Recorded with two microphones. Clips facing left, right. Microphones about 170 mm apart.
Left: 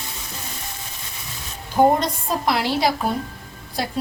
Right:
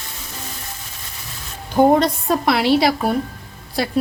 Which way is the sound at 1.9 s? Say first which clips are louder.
Right 6 dB; 65° right (ahead or behind).